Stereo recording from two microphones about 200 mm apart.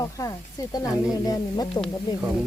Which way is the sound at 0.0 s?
15° left (ahead or behind).